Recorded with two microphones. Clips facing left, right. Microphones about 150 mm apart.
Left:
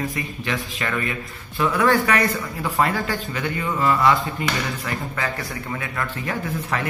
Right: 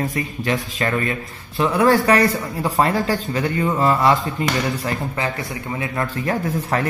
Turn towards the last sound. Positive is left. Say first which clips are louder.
# right 4 dB
turn(degrees=-40)  # may be behind; listen again after turning